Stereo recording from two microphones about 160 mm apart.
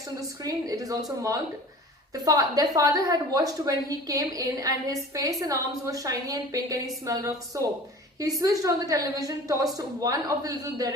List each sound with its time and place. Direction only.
0.2 s a woman's voice: 20° right (ahead or behind)